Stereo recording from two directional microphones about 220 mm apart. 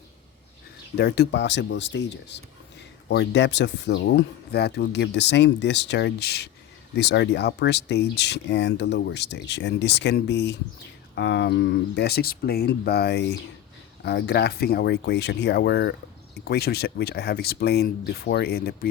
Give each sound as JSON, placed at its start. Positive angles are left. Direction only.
{"t": 0.9, "sound": "speech", "side_deg": 45}